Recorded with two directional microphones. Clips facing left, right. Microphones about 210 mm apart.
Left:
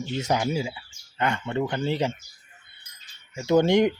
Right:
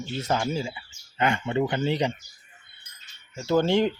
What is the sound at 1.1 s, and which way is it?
Speech, 10° right (ahead or behind).